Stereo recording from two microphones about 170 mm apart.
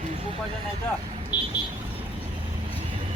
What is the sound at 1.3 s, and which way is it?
Vehicle, 10° right (ahead or behind).